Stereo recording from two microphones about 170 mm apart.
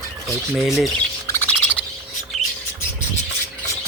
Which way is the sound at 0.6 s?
Centre (ahead or behind).